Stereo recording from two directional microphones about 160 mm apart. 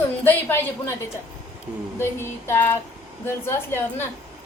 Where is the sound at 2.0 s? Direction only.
15° left (ahead or behind).